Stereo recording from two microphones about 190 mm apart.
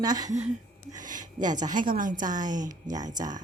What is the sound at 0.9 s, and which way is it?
A woman's voice, 45° right (ahead or behind).